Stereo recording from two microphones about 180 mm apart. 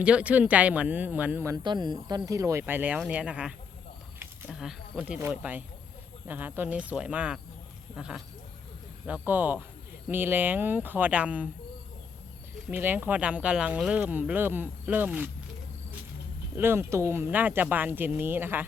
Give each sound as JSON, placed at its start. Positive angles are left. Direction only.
{"t": 0.0, "sound": "speech", "side_deg": -5}
{"t": 12.7, "sound": "speech", "side_deg": -10}
{"t": 16.6, "sound": "speech", "side_deg": -15}